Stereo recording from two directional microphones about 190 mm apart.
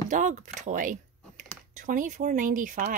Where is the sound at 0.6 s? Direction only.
40° right (ahead or behind).